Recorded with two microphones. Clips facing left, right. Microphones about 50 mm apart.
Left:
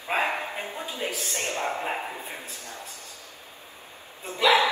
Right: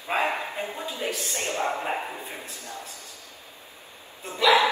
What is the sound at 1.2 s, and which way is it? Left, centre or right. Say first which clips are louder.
Speech: right 1 dB; left.